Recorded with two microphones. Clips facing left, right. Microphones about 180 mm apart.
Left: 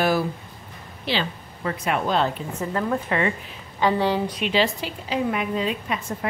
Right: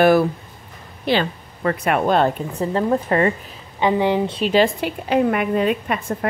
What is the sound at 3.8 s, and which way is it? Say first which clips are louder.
Speech: right 3 dB; 20° right (ahead or behind).